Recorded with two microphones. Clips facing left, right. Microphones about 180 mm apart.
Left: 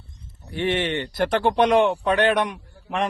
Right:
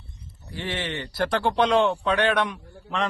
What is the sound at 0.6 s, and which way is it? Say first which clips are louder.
Speech: left 8 dB; 25° left (ahead or behind).